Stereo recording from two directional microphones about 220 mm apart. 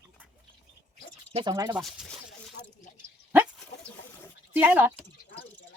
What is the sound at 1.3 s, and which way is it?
Speech, 20° right (ahead or behind).